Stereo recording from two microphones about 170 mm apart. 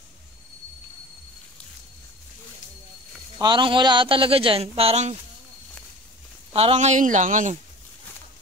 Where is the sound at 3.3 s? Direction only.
25° right (ahead or behind).